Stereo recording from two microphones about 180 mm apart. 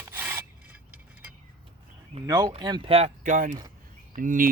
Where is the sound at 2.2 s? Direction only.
20° right (ahead or behind).